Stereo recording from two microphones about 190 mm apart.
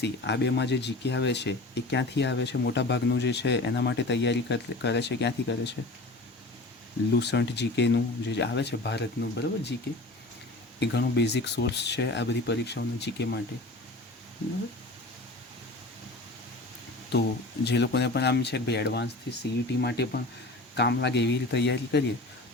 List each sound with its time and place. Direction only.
0.0 s speech: 65° left (ahead or behind)
7.1 s speech: 65° left (ahead or behind)
10.8 s speech: 65° left (ahead or behind)
17.1 s speech: 60° left (ahead or behind)